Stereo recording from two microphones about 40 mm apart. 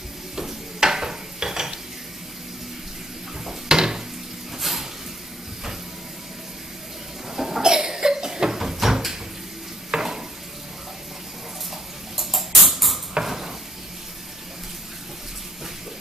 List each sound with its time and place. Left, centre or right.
0.4 s stir: centre
3.6 s a sound: centre
4.6 s a sound: centre
7.3 s cough: centre
9.8 s stir: centre
12.2 s music: centre
13.2 s dishes: centre